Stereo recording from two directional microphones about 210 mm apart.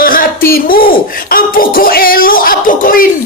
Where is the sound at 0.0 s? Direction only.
45° left (ahead or behind).